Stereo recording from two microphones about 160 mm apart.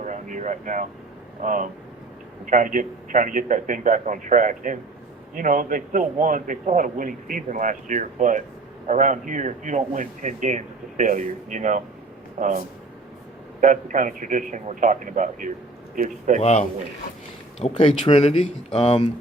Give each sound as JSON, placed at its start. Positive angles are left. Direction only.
{"t": 0.0, "sound": "a sound", "side_deg": -50}
{"t": 1.4, "sound": "a man's voice", "side_deg": -55}
{"t": 16.4, "sound": "a man's voice", "side_deg": 40}